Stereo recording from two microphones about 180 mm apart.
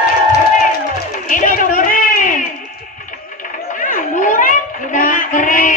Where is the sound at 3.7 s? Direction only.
45° left (ahead or behind).